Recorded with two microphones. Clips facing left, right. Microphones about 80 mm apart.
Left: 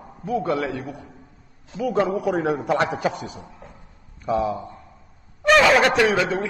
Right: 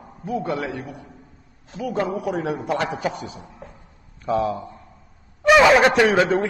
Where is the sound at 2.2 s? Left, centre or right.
Left.